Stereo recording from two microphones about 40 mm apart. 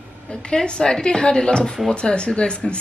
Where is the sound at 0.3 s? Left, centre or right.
Left.